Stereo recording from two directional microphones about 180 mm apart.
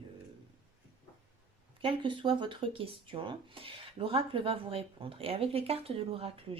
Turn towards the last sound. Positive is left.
turn(degrees=-30)  # may be behind; listen again after turning